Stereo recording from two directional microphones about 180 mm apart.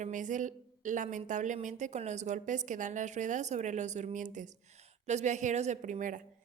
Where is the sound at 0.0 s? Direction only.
45° right (ahead or behind).